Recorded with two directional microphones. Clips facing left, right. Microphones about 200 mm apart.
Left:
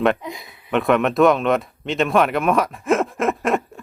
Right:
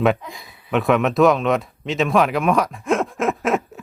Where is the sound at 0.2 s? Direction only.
20° left (ahead or behind).